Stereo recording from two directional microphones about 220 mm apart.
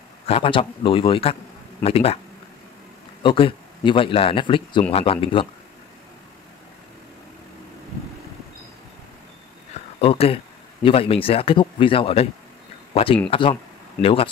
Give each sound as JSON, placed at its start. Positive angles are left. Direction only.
{"t": 0.3, "sound": "speech", "side_deg": 25}
{"t": 3.2, "sound": "speech", "side_deg": 25}
{"t": 9.9, "sound": "speech", "side_deg": 25}